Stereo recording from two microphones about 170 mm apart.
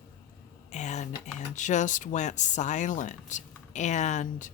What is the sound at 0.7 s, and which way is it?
A woman's voice, 45° left (ahead or behind).